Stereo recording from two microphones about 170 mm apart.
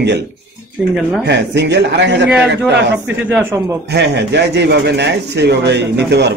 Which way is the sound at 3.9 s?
80° right.